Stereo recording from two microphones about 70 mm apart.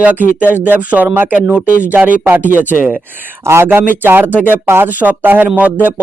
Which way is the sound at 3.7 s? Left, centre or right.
Right.